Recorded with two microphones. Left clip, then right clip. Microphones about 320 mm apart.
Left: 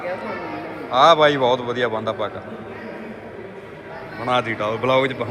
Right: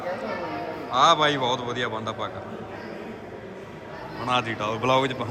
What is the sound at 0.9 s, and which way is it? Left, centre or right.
A man's voice, centre.